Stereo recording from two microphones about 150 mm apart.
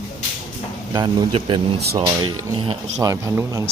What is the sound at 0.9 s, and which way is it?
Speech, 30° right (ahead or behind).